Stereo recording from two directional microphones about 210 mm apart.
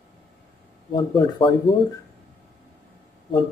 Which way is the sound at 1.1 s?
20° left (ahead or behind).